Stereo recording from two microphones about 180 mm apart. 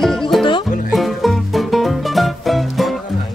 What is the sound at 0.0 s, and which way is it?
Music, centre (ahead or behind).